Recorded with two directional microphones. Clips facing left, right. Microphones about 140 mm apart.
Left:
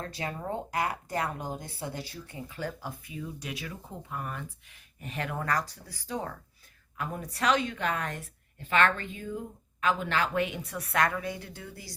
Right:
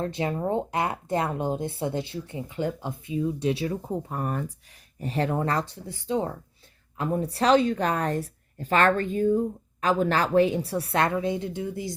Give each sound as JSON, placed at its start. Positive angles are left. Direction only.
{"t": 0.0, "sound": "speech", "side_deg": -25}